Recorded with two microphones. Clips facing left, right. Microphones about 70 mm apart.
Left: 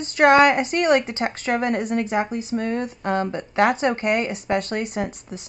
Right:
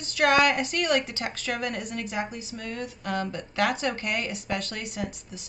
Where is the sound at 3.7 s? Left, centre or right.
Left.